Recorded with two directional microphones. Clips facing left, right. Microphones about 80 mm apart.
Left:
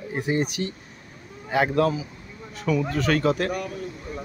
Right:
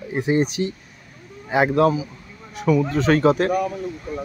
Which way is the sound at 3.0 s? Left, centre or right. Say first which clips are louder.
Right 5 dB; right.